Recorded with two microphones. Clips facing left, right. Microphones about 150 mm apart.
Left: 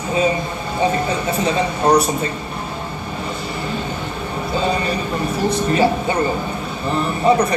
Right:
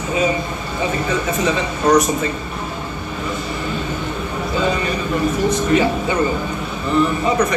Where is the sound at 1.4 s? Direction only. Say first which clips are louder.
Left 2 dB; 30° left (ahead or behind).